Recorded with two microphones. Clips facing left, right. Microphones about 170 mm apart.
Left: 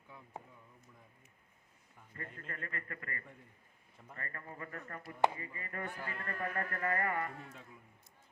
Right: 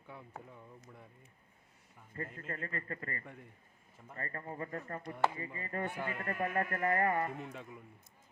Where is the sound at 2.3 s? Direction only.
35° right (ahead or behind).